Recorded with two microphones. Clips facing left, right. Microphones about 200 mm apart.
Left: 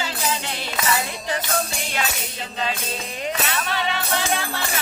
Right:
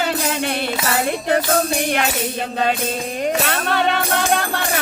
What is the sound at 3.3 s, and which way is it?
Music, 55° right (ahead or behind).